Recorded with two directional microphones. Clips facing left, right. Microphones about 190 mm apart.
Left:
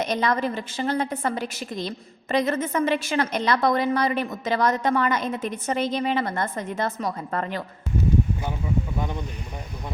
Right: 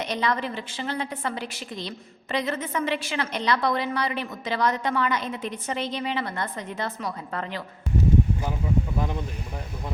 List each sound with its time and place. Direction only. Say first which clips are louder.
0.0 s a woman's voice: left 3 dB; 45° left (ahead or behind)